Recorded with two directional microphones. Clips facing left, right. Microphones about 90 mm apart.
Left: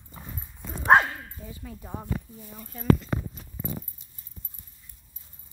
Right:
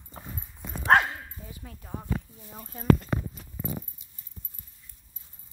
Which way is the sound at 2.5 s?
35° right (ahead or behind).